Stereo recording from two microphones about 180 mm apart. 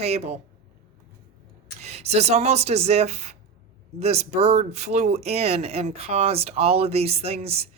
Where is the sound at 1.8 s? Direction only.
35° right (ahead or behind).